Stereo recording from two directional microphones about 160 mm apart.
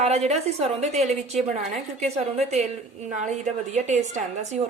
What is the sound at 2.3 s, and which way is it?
A woman's voice, 45° right (ahead or behind).